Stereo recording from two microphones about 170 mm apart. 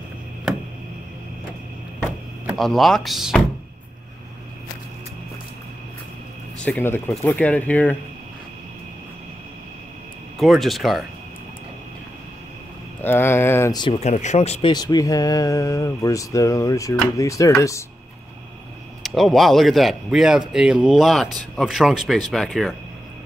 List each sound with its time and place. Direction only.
2.5 s speech: centre (ahead or behind)
6.6 s speech: 10° left (ahead or behind)
10.4 s speech: centre (ahead or behind)
13.0 s speech: 15° left (ahead or behind)
13.9 s speech: 40° left (ahead or behind)
14.7 s speech: 25° left (ahead or behind)
19.0 s speech: centre (ahead or behind)